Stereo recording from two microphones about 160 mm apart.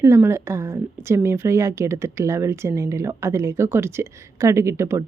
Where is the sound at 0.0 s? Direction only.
15° right (ahead or behind).